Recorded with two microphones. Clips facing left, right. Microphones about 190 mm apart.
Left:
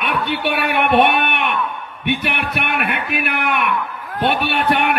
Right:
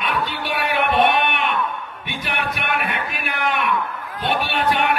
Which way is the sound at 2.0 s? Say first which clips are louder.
Left 7 dB; 60° left (ahead or behind).